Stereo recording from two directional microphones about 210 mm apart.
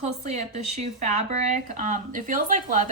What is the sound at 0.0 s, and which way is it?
Speech, 35° right (ahead or behind).